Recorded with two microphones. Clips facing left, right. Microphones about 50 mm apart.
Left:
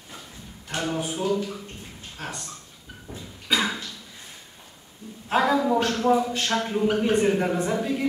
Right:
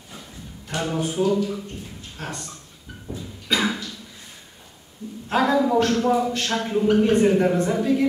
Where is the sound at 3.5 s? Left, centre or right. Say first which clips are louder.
Right 1 dB; centre.